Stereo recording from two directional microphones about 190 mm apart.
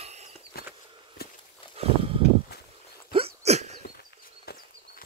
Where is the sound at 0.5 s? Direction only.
55° left (ahead or behind).